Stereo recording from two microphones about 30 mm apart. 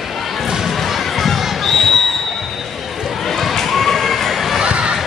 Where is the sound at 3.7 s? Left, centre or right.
Centre.